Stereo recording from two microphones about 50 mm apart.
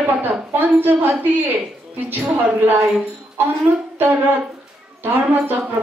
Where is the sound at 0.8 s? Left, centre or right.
Right.